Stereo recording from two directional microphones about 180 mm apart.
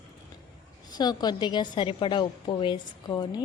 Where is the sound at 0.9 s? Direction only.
20° left (ahead or behind).